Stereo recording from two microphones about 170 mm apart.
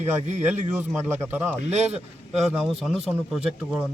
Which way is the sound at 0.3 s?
45° right (ahead or behind).